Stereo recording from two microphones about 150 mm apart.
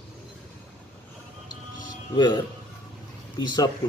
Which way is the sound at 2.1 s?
30° left (ahead or behind).